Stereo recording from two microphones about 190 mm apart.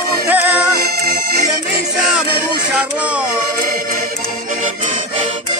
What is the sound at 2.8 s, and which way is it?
Speech, 5° right (ahead or behind).